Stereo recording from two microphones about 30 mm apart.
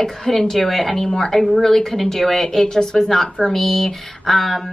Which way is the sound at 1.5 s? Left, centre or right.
Centre.